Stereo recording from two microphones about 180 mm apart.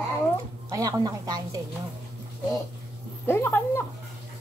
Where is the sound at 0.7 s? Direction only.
20° right (ahead or behind).